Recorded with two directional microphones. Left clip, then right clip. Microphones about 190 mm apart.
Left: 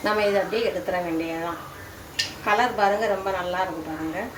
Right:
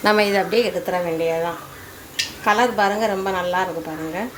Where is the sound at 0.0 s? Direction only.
50° right (ahead or behind).